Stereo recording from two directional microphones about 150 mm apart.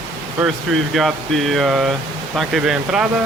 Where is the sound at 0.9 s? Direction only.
Centre (ahead or behind).